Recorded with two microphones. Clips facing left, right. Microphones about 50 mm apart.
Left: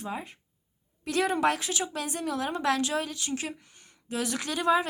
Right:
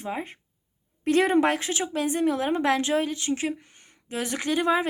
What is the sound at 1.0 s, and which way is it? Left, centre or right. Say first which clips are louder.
A woman's voice: right 5 dB; right.